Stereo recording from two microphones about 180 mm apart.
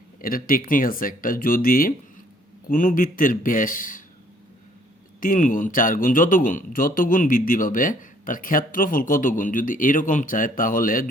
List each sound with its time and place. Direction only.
0.2 s speech: 50° left (ahead or behind)
5.2 s speech: 50° left (ahead or behind)